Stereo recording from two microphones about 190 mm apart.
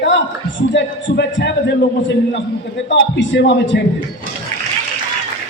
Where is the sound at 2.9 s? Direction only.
70° left (ahead or behind).